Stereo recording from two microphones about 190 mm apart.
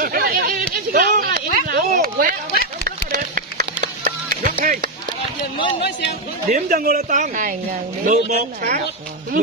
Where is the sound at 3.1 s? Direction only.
45° right (ahead or behind).